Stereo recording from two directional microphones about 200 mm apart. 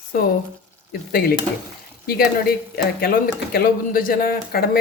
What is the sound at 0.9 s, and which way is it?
Speech, 50° left (ahead or behind).